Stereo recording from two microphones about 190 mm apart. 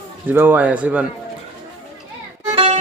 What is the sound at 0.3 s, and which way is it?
Speech, 10° right (ahead or behind).